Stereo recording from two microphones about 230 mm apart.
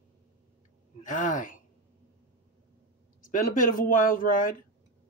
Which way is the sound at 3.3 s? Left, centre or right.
Left.